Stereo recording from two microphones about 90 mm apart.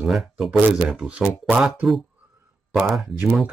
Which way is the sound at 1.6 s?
5° right (ahead or behind).